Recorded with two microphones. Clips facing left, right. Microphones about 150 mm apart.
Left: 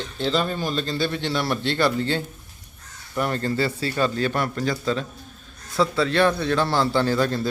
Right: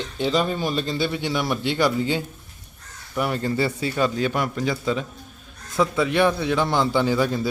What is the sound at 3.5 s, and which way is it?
A man's voice, 20° right (ahead or behind).